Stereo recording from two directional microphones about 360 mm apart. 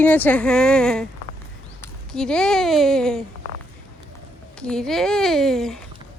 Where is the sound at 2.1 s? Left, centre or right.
Centre.